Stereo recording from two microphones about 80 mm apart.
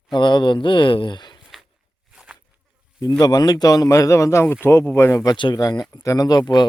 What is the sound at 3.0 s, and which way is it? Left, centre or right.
Speech, left.